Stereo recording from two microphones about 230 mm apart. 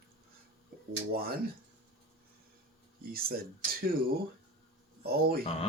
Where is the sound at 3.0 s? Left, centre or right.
Right.